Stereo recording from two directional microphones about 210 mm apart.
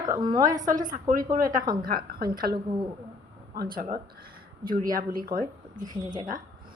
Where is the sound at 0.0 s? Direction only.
20° right (ahead or behind).